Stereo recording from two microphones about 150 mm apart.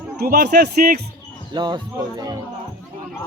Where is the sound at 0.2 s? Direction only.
85° right.